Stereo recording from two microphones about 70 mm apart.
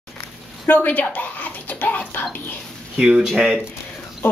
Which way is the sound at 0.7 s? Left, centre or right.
Left.